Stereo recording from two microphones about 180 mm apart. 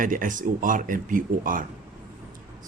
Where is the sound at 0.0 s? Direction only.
50° right (ahead or behind).